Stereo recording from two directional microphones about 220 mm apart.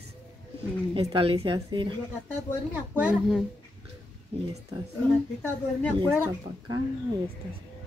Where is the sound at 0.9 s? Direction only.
25° right (ahead or behind).